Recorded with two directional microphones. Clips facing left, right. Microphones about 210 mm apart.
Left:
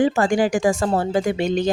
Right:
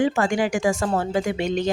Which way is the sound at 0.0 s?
35° left (ahead or behind).